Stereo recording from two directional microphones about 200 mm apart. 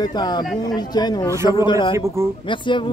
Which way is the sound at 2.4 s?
25° left (ahead or behind).